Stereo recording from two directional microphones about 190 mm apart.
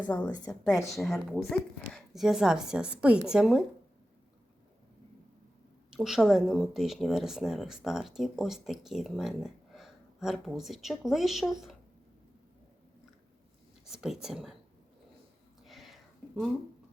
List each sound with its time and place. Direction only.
0.0 s a woman's voice: 10° left (ahead or behind)
5.9 s speech: centre (ahead or behind)
13.8 s speech: 5° right (ahead or behind)
15.6 s a sound: centre (ahead or behind)